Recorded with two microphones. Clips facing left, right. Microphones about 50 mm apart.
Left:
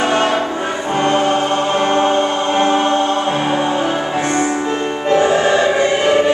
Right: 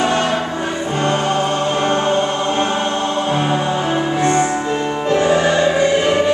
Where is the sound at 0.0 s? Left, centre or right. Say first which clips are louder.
Left 2 dB; left.